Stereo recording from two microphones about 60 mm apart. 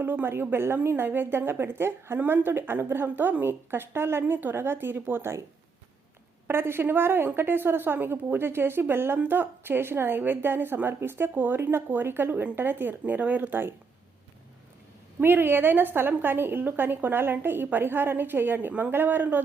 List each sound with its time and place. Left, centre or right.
0.0 s a woman's voice: right
6.5 s a woman's voice: right
15.2 s a woman's voice: right